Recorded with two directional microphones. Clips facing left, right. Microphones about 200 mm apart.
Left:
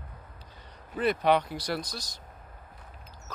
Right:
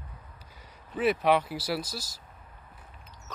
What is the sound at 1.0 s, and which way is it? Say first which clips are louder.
Speech: even; 5° right (ahead or behind).